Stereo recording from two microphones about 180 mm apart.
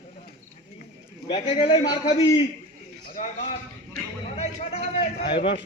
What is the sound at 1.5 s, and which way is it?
Speech, 25° left (ahead or behind).